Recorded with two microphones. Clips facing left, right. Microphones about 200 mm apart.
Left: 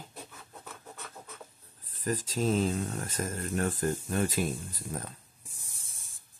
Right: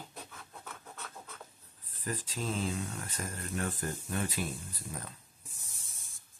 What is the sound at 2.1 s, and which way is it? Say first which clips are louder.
Speech: left 8 dB; 40° left (ahead or behind).